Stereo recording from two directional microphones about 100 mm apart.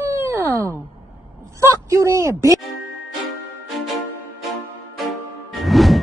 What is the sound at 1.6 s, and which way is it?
Speech, 30° right (ahead or behind).